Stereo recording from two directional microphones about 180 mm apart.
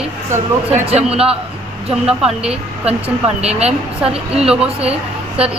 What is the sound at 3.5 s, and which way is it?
Speech, 35° right (ahead or behind).